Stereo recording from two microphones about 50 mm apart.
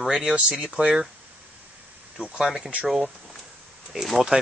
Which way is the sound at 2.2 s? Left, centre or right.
Centre.